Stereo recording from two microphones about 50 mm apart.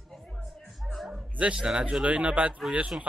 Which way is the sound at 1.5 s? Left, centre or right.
Centre.